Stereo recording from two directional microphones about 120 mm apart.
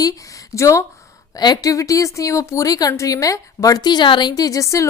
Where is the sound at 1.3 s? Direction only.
35° left (ahead or behind).